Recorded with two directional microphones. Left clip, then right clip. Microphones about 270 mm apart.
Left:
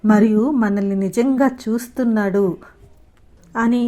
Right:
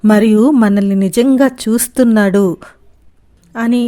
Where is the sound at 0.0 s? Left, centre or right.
Right.